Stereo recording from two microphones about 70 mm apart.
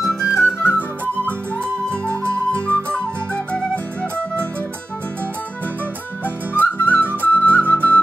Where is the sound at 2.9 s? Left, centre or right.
Centre.